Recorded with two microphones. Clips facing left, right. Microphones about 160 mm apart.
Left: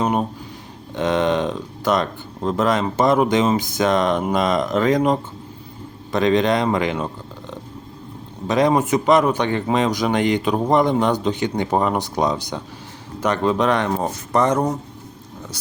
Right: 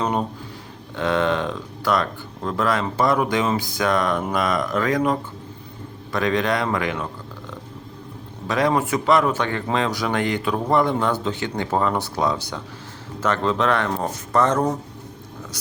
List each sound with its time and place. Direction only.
0.0 s speech: 15° left (ahead or behind)
8.4 s speech: 20° left (ahead or behind)